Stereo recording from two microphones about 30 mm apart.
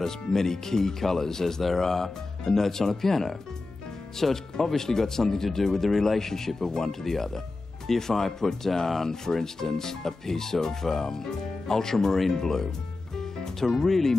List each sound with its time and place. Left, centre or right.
0.0 s speech: centre
13.2 s music: centre